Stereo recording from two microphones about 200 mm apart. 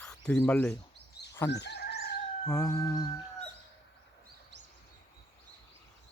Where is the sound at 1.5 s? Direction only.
60° left (ahead or behind).